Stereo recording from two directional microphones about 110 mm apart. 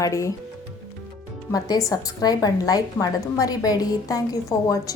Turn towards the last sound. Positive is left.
turn(degrees=30)  # may be behind; listen again after turning